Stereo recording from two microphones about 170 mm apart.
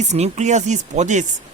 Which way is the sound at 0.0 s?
40° right (ahead or behind).